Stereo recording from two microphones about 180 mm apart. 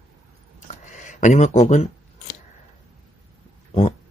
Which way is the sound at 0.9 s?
40° left (ahead or behind).